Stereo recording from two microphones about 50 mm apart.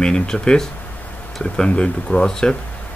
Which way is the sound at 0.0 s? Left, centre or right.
Centre.